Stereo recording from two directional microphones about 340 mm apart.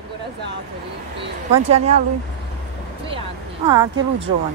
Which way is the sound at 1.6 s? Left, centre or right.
Centre.